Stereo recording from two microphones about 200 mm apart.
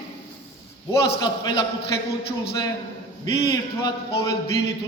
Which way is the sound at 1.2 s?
20° left (ahead or behind).